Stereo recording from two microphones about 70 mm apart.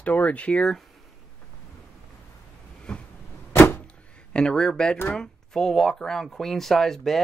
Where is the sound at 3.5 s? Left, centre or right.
Left.